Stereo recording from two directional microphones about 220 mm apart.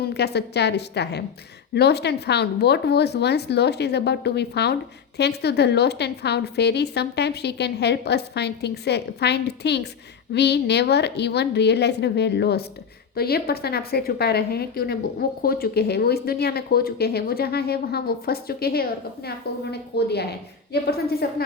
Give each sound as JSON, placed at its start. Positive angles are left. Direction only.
{"t": 0.0, "sound": "speech", "side_deg": 50}